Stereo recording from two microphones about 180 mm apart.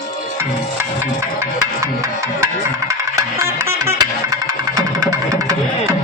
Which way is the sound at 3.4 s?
15° right (ahead or behind).